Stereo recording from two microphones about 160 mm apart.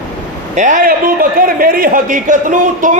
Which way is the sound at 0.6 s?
55° right (ahead or behind).